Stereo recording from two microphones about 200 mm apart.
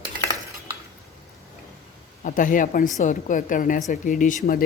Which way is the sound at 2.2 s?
40° left (ahead or behind).